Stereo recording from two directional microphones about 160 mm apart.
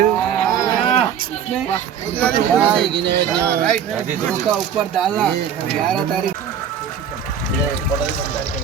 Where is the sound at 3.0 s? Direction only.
90° right.